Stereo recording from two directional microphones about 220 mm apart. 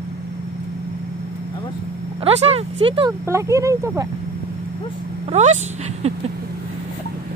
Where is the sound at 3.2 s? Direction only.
15° right (ahead or behind).